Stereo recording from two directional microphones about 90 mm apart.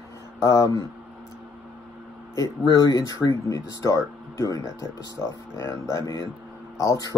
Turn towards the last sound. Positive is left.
turn(degrees=40)  # may be behind; listen again after turning